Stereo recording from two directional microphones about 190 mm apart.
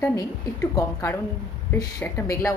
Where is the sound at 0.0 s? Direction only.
15° left (ahead or behind).